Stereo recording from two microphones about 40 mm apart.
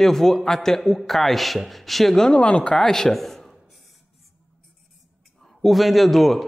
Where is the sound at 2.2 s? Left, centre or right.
Left.